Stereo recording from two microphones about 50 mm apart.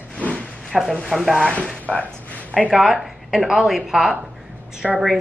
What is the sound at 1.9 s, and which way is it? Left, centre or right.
Speech, centre.